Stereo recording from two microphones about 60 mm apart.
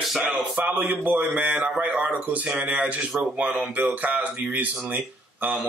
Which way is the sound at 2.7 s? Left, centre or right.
Right.